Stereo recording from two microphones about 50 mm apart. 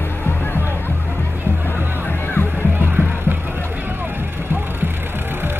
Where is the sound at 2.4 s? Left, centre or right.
Left.